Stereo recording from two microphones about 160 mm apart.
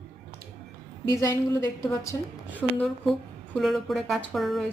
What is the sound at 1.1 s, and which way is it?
Speech, 20° left (ahead or behind).